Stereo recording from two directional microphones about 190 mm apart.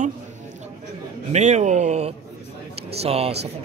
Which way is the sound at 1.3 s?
35° right (ahead or behind).